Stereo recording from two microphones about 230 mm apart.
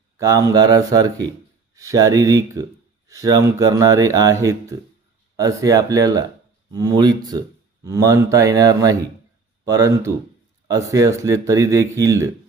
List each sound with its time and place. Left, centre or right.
0.2 s a man's voice: centre